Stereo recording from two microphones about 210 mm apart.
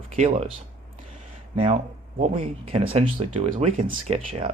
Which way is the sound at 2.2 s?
30° right (ahead or behind).